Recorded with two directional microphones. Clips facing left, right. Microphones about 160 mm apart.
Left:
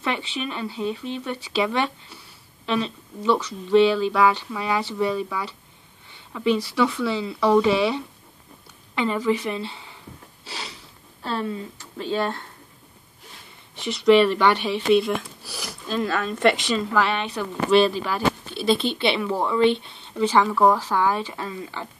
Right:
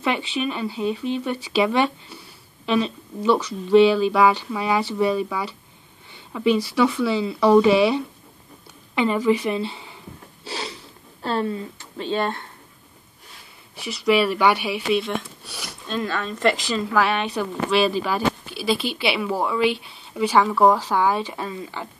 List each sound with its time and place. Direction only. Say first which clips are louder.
0.0 s speech: right 4 dB; 15° right (ahead or behind)
10.4 s a sound: right 6 dB; 30° right (ahead or behind)
12.0 s speech: right 1 dB; 20° right (ahead or behind)
13.7 s speech: left 4 dB; 5° right (ahead or behind)
17.6 s speech: left 3 dB; 5° right (ahead or behind)